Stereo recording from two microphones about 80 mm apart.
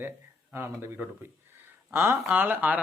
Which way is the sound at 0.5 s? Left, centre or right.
Right.